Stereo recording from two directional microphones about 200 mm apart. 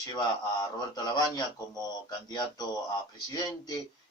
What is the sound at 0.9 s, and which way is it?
Speech, 20° left (ahead or behind).